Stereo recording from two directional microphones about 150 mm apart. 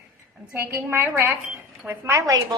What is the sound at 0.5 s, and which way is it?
A woman's voice, 15° right (ahead or behind).